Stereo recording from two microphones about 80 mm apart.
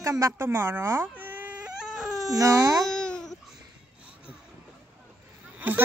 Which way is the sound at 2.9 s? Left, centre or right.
Centre.